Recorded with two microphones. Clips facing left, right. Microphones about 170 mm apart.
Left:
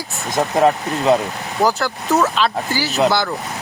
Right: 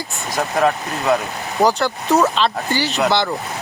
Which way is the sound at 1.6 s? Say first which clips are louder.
Right 1 dB; centre (ahead or behind).